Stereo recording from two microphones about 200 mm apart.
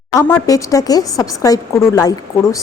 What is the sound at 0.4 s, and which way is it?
A woman's voice, 15° left (ahead or behind).